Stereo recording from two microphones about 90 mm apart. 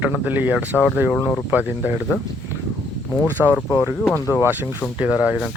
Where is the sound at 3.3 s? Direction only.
25° right (ahead or behind).